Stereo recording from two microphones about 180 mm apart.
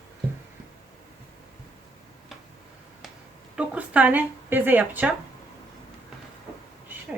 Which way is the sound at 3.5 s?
10° right (ahead or behind).